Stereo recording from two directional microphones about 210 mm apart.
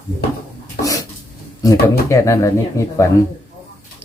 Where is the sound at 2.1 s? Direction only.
15° left (ahead or behind).